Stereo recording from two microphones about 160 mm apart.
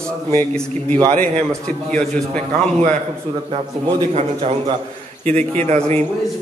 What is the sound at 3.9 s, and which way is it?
A man's voice, 35° right (ahead or behind).